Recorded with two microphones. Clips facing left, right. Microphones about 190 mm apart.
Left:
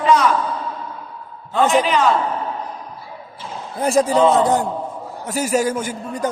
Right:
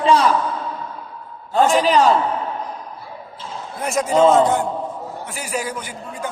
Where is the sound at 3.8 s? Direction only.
30° left (ahead or behind).